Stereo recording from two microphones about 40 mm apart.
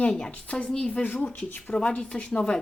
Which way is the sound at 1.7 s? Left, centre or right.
Left.